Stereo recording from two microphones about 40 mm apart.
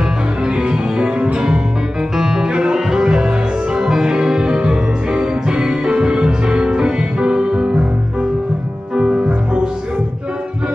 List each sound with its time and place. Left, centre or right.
0.4 s music: right
8.9 s music: right